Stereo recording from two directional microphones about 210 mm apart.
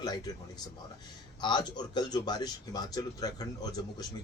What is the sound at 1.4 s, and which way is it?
Speech, 20° left (ahead or behind).